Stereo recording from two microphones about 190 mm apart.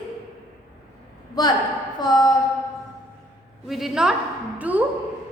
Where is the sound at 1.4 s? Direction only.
20° left (ahead or behind).